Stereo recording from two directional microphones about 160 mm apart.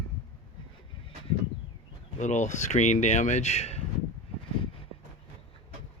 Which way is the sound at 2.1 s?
50° left (ahead or behind).